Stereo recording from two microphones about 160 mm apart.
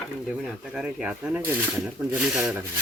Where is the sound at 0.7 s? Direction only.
5° right (ahead or behind).